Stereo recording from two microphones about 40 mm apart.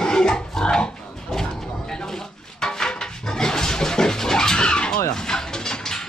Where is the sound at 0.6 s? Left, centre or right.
Centre.